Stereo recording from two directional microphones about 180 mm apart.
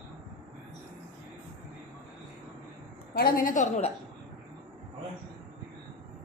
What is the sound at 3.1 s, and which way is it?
Speech, 55° left (ahead or behind).